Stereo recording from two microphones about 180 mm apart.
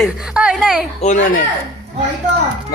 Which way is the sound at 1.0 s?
40° left (ahead or behind).